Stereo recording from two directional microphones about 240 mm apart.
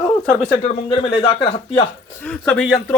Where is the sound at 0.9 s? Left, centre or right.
Left.